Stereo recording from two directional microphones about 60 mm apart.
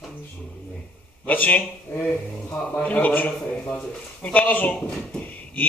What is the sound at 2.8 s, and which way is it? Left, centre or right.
A man's voice, left.